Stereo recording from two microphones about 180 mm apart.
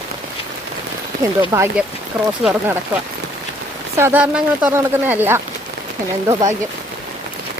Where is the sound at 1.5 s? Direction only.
20° right (ahead or behind).